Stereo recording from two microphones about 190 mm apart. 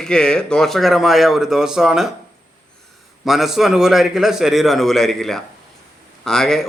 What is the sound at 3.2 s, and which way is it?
A man's voice, centre (ahead or behind).